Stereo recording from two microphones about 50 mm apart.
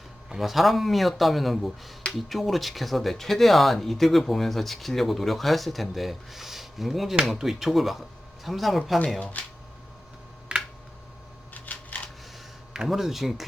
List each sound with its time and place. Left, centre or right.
0.3 s speech: centre
11.5 s a sound: left
12.9 s speech: centre